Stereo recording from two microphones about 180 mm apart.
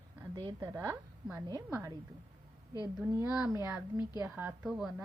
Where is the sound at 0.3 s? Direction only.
20° right (ahead or behind).